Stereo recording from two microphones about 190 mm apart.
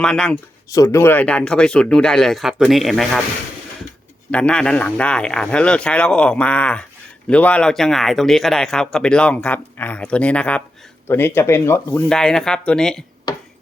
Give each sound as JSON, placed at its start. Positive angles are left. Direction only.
{"t": 0.0, "sound": "a man's voice", "side_deg": 5}
{"t": 0.7, "sound": "a man's voice", "side_deg": 15}
{"t": 4.3, "sound": "a man's voice", "side_deg": 5}
{"t": 13.3, "sound": "finger snapping", "side_deg": 20}